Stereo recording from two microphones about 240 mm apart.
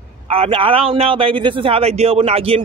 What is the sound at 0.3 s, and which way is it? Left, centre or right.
Speech, right.